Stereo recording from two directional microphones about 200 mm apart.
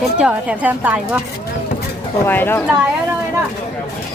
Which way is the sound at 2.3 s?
10° left (ahead or behind).